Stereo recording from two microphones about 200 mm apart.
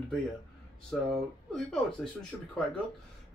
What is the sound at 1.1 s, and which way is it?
Speech, centre (ahead or behind).